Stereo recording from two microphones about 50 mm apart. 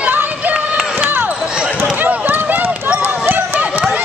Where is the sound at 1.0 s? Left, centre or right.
Right.